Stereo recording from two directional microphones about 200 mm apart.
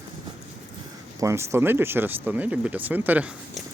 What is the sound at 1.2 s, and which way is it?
Speech, 15° right (ahead or behind).